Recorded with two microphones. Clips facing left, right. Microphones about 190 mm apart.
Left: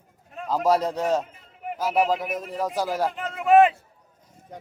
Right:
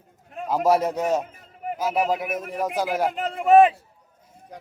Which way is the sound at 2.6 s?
15° right (ahead or behind).